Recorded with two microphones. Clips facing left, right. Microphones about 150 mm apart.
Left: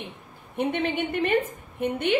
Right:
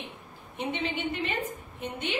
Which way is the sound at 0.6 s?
55° left (ahead or behind).